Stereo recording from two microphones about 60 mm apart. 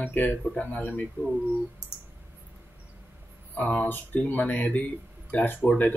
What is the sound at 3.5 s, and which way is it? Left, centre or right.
Speech, left.